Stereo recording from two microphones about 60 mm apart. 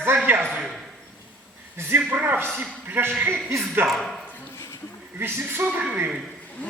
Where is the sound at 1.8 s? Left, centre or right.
Right.